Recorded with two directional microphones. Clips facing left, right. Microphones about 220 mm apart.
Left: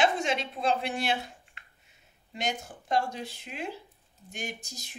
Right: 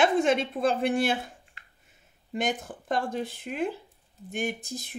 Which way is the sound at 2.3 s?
50° right (ahead or behind).